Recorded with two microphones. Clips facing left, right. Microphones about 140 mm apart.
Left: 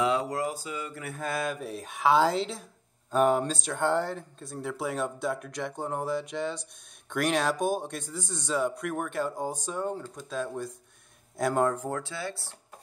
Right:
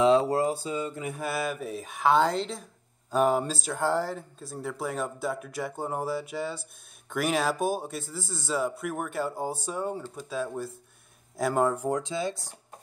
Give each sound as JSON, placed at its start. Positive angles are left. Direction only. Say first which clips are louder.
{"t": 0.0, "sound": "speech", "louder": "right 6 dB", "side_deg": -30}
{"t": 1.1, "sound": "speech", "louder": "left 2 dB", "side_deg": -5}